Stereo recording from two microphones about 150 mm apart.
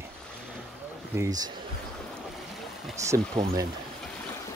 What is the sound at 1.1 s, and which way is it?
Speech, 25° right (ahead or behind).